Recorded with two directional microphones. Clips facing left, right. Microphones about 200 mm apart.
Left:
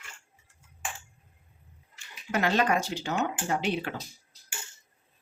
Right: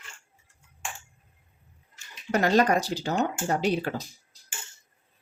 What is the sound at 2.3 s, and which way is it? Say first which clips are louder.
Speech: right 4 dB; 40° right (ahead or behind).